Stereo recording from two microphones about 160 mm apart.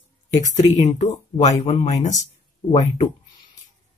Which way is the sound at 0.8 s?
45° left (ahead or behind).